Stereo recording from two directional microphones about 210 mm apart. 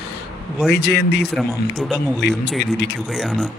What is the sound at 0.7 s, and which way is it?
Speech, 50° left (ahead or behind).